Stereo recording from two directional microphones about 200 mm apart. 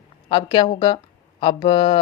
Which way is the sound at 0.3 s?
25° left (ahead or behind).